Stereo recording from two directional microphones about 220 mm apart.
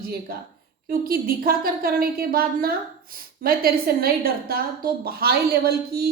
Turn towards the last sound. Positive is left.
turn(degrees=-45)  # may be behind; listen again after turning